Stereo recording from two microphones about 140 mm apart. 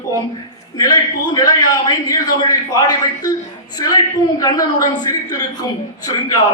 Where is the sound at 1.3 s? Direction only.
25° left (ahead or behind).